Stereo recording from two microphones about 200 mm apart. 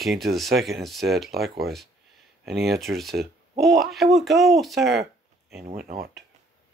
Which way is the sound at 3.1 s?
50° right (ahead or behind).